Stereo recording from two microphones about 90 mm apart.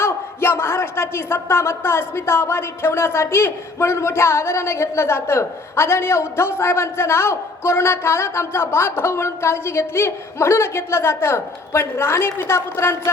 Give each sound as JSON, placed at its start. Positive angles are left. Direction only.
{"t": 0.0, "sound": "a man's voice", "side_deg": 30}